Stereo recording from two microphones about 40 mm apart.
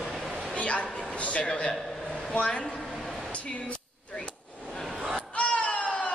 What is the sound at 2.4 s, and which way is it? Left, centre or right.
Speech, left.